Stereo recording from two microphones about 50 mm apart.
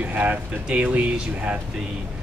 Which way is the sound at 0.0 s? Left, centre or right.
Right.